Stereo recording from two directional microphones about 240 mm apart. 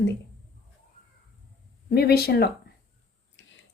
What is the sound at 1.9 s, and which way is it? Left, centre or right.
Speech, left.